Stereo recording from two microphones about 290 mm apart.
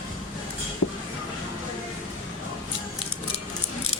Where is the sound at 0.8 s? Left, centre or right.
Left.